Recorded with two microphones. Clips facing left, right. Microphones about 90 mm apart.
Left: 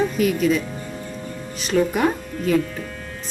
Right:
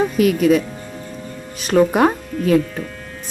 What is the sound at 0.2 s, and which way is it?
Speech, 55° right (ahead or behind).